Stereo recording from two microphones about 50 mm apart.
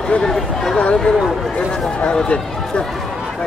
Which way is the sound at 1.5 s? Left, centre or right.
Centre.